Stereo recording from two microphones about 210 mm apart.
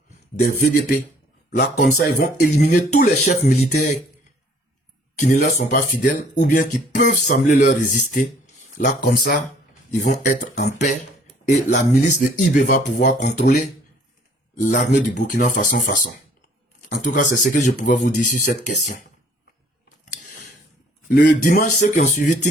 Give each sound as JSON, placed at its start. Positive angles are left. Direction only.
{"t": 0.3, "sound": "speech", "side_deg": 35}
{"t": 1.7, "sound": "speech", "side_deg": 45}
{"t": 5.1, "sound": "speech", "side_deg": 35}
{"t": 11.4, "sound": "speech", "side_deg": 35}
{"t": 14.6, "sound": "speech", "side_deg": 35}
{"t": 21.2, "sound": "speech", "side_deg": 40}